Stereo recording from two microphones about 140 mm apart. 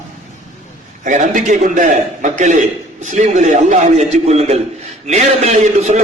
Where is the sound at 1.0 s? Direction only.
60° right (ahead or behind).